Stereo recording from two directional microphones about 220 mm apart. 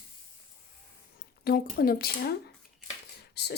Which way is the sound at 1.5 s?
40° left (ahead or behind).